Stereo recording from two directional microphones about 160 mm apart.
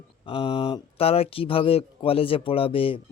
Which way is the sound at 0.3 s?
35° left (ahead or behind).